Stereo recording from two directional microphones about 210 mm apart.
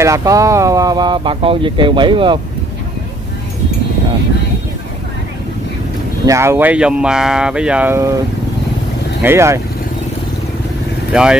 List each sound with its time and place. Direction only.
0.0 s speech: 15° right (ahead or behind)
6.2 s speech: 15° right (ahead or behind)
9.2 s speech: 10° right (ahead or behind)
11.1 s speech: 5° right (ahead or behind)